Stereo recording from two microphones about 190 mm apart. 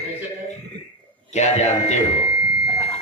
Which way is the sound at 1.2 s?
35° left (ahead or behind).